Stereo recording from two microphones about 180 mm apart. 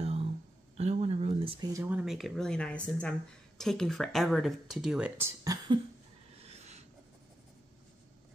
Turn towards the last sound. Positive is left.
turn(degrees=-35)  # may be behind; listen again after turning